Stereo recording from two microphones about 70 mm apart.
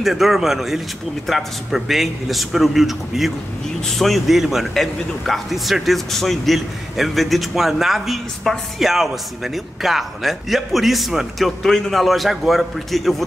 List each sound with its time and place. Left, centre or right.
0.0 s a man's voice: centre